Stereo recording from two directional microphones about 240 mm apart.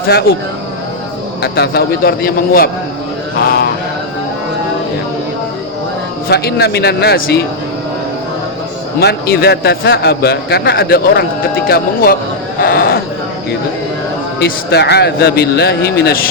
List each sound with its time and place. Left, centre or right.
0.1 s a man's voice: left
1.4 s a man's voice: left
6.2 s a man's voice: left
9.0 s a man's voice: left
12.6 s a sound: left
14.3 s speech: left